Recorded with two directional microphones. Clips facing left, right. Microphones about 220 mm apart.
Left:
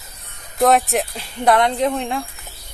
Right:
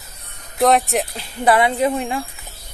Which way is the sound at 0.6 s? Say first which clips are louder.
Even; centre (ahead or behind).